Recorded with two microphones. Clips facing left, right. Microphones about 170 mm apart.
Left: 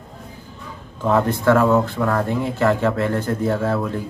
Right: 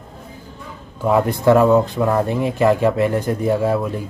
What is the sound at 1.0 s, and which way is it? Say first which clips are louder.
Speech: right 2 dB; 15° right (ahead or behind).